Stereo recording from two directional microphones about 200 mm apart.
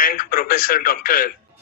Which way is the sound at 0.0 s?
45° left (ahead or behind).